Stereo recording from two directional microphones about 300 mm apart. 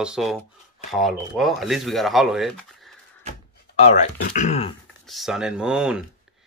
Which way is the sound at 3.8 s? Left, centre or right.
Left.